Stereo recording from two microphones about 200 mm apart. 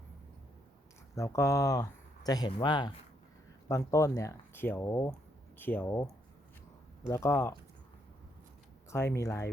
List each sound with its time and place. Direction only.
1.1 s speech: 15° left (ahead or behind)
7.1 s speech: 15° left (ahead or behind)
8.9 s speech: 15° left (ahead or behind)